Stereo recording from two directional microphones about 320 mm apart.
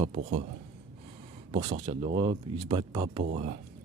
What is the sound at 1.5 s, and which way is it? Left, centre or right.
Speech, centre.